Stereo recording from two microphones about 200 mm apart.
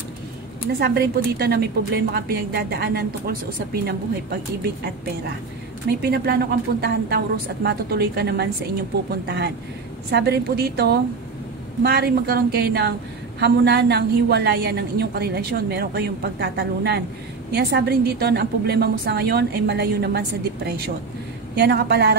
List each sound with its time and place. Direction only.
0.7 s a woman's voice: 50° right (ahead or behind)
5.9 s a woman's voice: 50° right (ahead or behind)